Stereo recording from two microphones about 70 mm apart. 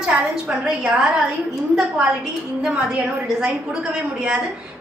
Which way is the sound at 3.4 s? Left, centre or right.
Centre.